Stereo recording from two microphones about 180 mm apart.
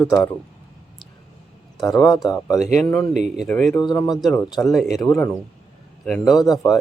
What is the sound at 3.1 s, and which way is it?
Speech, 40° right (ahead or behind).